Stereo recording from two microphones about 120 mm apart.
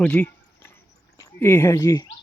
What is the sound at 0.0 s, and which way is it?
Speech, 10° left (ahead or behind).